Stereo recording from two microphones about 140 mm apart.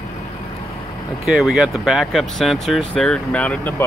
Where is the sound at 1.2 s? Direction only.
Centre (ahead or behind).